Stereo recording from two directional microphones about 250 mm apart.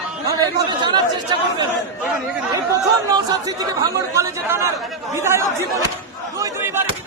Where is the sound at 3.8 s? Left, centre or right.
Centre.